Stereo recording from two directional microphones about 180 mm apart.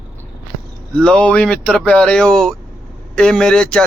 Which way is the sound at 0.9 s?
5° left (ahead or behind).